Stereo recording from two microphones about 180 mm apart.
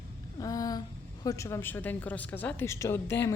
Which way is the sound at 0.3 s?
20° left (ahead or behind).